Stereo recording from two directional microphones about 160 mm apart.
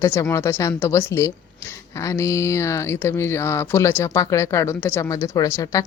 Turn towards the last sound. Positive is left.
turn(degrees=20)  # may be behind; listen again after turning